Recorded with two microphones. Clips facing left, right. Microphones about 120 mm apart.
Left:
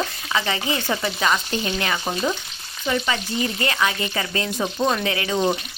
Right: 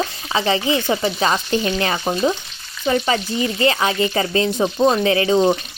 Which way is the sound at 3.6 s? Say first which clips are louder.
Right 8 dB; 30° right (ahead or behind).